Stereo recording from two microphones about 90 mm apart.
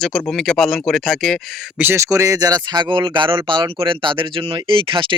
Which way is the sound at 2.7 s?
60° right (ahead or behind).